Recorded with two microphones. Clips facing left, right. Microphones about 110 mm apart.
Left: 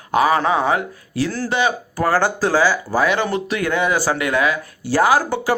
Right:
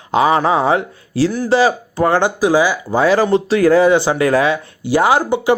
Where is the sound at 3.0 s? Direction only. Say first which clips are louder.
Right 9 dB; 30° right (ahead or behind).